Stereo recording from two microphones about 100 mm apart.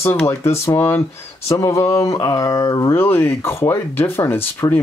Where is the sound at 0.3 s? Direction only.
25° left (ahead or behind).